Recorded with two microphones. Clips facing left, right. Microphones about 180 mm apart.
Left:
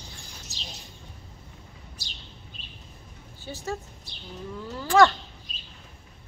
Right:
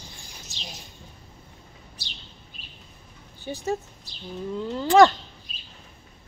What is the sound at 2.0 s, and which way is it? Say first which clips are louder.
Bird: right 1 dB; 45° left (ahead or behind).